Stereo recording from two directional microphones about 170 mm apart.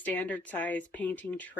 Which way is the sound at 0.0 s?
10° left (ahead or behind).